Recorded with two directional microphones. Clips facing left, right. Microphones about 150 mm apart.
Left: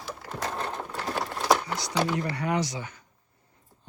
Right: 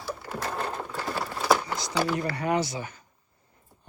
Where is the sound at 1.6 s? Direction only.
10° left (ahead or behind).